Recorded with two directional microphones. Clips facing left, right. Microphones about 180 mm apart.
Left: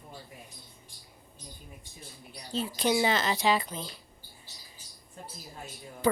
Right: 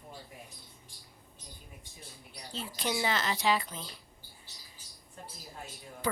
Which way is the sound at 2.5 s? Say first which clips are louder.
Left 7 dB; 25° left (ahead or behind).